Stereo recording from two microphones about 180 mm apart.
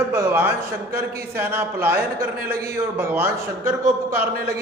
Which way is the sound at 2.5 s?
60° right (ahead or behind).